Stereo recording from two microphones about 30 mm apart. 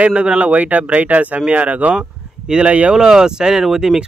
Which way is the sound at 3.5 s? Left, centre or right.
Centre.